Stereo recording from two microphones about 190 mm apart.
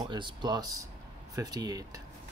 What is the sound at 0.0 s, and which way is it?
A man's voice, 25° right (ahead or behind).